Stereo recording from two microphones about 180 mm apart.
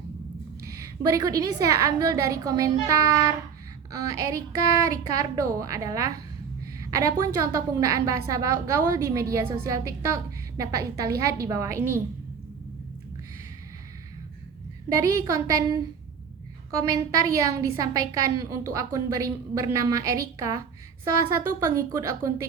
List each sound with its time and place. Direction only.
0.7 s a woman's voice: 20° right (ahead or behind)
14.8 s a woman's voice: 20° right (ahead or behind)
21.6 s a woman's voice: 15° right (ahead or behind)